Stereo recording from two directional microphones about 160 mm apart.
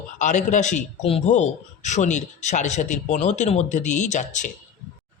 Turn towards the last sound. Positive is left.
turn(degrees=50)  # may be behind; listen again after turning